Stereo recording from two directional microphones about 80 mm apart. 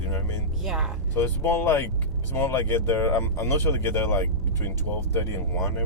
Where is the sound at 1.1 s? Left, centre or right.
Left.